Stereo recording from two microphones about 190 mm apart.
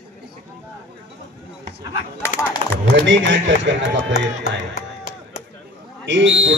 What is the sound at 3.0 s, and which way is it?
Speech, 75° right (ahead or behind).